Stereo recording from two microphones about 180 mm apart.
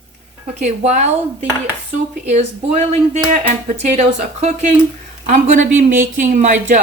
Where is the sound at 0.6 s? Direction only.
40° right (ahead or behind).